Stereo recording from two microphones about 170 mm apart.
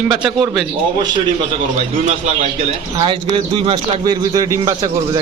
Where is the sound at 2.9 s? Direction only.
30° right (ahead or behind).